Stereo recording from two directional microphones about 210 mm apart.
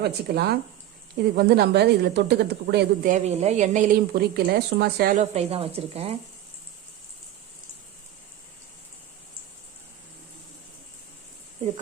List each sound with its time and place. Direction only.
0.0 s speech: 50° right (ahead or behind)
3.0 s a woman's voice: 35° right (ahead or behind)
5.2 s speech: 30° right (ahead or behind)